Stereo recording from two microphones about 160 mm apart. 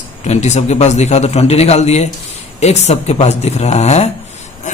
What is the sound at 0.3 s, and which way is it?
Speech, 45° left (ahead or behind).